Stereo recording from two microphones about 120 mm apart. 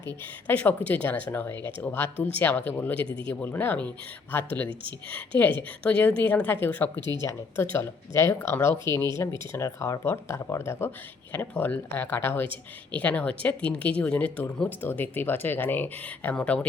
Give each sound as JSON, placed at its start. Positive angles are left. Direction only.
{"t": 0.4, "sound": "speech", "side_deg": 15}
{"t": 7.0, "sound": "speech", "side_deg": -35}
{"t": 7.3, "sound": "speech", "side_deg": 20}